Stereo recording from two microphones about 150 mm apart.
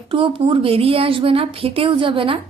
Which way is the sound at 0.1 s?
35° right (ahead or behind).